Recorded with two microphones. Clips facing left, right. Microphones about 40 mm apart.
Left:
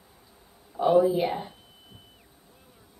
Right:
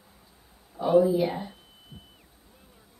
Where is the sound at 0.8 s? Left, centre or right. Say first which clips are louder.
Even; left.